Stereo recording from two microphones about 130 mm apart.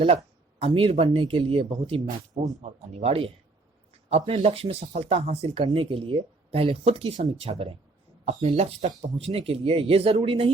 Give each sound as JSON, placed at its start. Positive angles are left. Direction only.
{"t": 0.6, "sound": "speech", "side_deg": -45}
{"t": 7.2, "sound": "speech", "side_deg": -40}
{"t": 8.4, "sound": "speech", "side_deg": -50}